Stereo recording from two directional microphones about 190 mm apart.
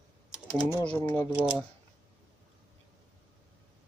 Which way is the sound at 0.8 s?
10° left (ahead or behind).